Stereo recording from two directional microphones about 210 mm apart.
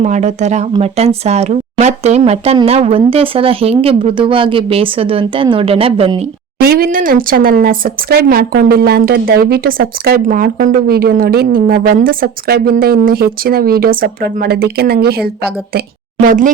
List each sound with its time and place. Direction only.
0.0 s speech: 35° right (ahead or behind)
6.6 s speech: 45° right (ahead or behind)